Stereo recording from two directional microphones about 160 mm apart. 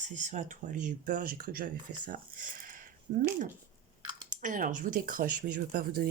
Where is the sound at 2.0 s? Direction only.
60° right (ahead or behind).